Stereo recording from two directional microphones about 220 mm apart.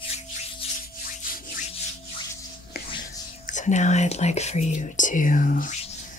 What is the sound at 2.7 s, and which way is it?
Whispering, 45° left (ahead or behind).